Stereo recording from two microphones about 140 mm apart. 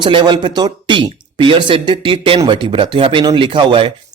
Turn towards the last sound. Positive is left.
turn(degrees=-35)  # may be behind; listen again after turning